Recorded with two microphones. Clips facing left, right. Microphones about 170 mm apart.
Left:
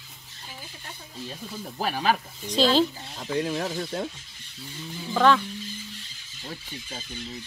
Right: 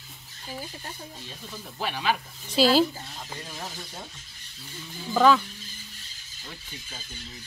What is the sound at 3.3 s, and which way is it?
Speech, 80° left.